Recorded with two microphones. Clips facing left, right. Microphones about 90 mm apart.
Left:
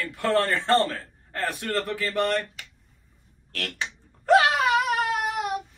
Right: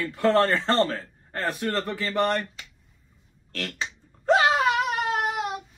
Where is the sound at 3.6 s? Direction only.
25° right (ahead or behind).